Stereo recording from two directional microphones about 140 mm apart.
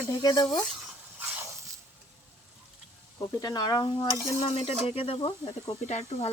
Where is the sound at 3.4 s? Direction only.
30° left (ahead or behind).